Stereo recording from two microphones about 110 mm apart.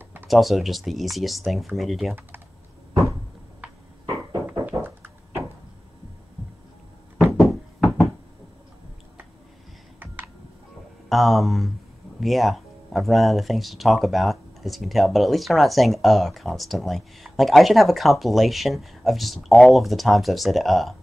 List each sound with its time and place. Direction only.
0.3 s speech: centre (ahead or behind)
2.9 s cupboard open or close: 30° right (ahead or behind)
4.7 s a sound: 20° right (ahead or behind)
7.3 s knock: 25° left (ahead or behind)
9.9 s computer keyboard: 20° right (ahead or behind)
11.1 s speech: centre (ahead or behind)